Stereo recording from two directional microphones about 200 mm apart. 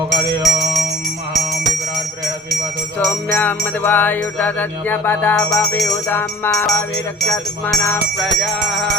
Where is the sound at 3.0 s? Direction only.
10° left (ahead or behind).